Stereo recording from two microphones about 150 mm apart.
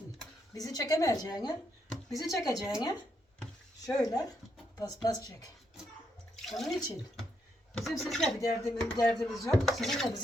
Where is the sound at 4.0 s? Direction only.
25° left (ahead or behind).